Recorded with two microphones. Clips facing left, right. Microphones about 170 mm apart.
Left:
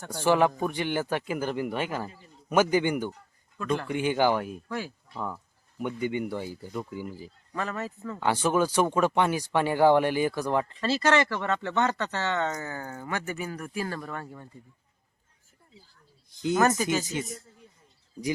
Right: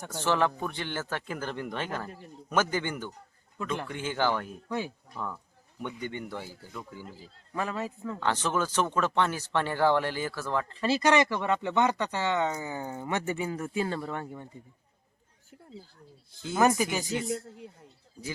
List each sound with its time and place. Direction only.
0.1 s speech: 15° left (ahead or behind)
7.5 s speech: 10° right (ahead or behind)
8.2 s speech: 10° left (ahead or behind)
10.8 s speech: 15° right (ahead or behind)
16.3 s snake: 20° left (ahead or behind)
16.6 s speech: 15° right (ahead or behind)
17.1 s a man's voice: 20° left (ahead or behind)
17.3 s speech: 75° right (ahead or behind)